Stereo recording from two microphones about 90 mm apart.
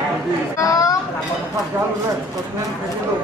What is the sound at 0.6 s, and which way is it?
Chatter, 40° left (ahead or behind).